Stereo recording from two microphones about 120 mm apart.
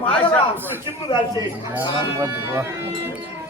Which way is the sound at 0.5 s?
15° right (ahead or behind).